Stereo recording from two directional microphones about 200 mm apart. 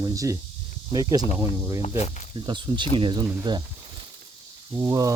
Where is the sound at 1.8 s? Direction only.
30° left (ahead or behind).